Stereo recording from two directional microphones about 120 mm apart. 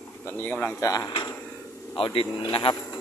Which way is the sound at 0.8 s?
30° left (ahead or behind).